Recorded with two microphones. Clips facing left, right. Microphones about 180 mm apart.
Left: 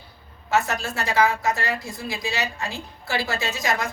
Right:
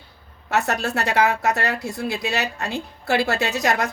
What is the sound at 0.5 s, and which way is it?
A woman's voice, 65° right (ahead or behind).